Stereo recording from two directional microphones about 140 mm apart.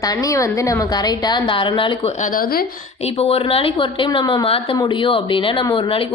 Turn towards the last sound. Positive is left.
turn(degrees=40)  # may be behind; listen again after turning